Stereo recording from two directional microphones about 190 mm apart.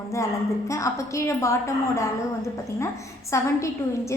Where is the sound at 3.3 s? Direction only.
15° left (ahead or behind).